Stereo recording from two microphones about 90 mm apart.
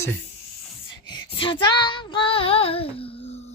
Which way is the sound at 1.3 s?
75° left (ahead or behind).